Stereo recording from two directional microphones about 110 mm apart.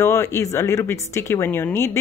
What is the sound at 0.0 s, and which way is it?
A woman's voice, 25° left (ahead or behind).